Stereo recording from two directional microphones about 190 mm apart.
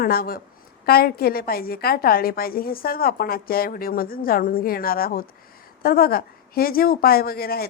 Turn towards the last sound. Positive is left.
turn(degrees=55)  # may be behind; listen again after turning